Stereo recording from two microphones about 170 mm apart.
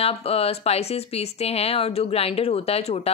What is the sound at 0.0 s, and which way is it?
Speech, 35° left (ahead or behind).